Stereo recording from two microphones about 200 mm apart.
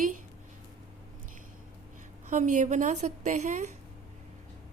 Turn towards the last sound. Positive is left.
turn(degrees=-35)  # may be behind; listen again after turning